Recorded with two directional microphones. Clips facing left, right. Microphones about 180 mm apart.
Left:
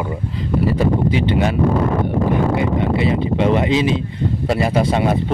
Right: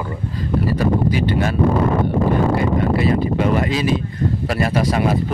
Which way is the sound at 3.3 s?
20° left (ahead or behind).